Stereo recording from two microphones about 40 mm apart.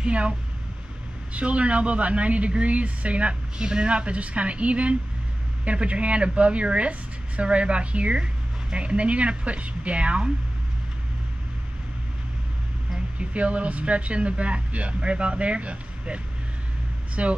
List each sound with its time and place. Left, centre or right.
0.0 s speech: right
1.3 s speech: right
13.2 s speech: right